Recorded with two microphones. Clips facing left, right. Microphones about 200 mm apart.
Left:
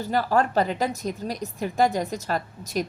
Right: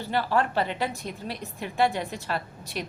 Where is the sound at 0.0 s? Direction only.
40° left (ahead or behind).